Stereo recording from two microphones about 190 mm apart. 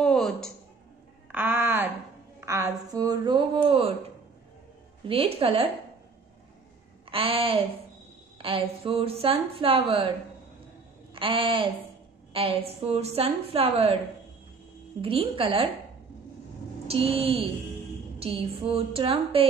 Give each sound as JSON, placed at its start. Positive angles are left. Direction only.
{"t": 0.0, "sound": "a sound", "side_deg": 5}
{"t": 1.3, "sound": "a sound", "side_deg": -10}
{"t": 5.0, "sound": "a woman's voice", "side_deg": -30}
{"t": 7.1, "sound": "a woman's voice", "side_deg": -30}
{"t": 11.1, "sound": "a woman's voice", "side_deg": -25}
{"t": 15.0, "sound": "a woman's voice", "side_deg": -30}
{"t": 16.8, "sound": "a woman's voice", "side_deg": -30}